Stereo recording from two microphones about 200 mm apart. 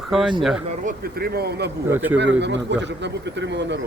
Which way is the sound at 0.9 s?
50° right (ahead or behind).